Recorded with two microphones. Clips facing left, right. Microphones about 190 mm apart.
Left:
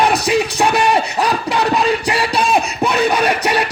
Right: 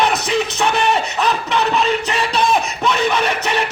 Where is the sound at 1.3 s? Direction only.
35° left (ahead or behind).